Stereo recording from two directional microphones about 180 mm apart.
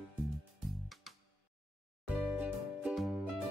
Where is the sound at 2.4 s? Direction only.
5° right (ahead or behind).